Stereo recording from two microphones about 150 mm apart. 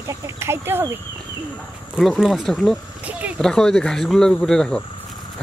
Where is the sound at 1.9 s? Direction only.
Centre (ahead or behind).